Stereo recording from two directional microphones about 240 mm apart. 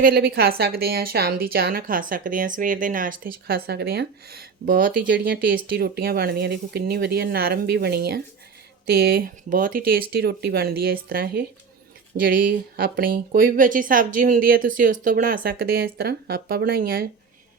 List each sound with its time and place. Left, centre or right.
0.0 s speech: right